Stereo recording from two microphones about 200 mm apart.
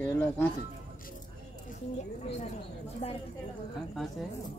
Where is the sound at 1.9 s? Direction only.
35° left (ahead or behind).